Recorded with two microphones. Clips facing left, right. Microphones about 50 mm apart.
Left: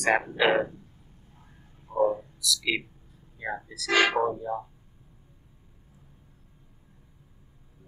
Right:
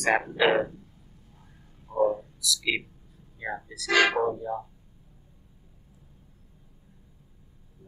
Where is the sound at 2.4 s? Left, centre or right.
Centre.